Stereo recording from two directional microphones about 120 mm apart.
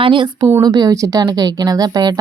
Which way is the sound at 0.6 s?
35° right (ahead or behind).